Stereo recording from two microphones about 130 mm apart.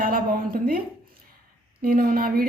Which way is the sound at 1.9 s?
90° right.